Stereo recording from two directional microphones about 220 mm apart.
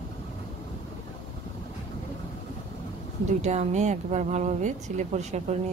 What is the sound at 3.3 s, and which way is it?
Speech, 30° right (ahead or behind).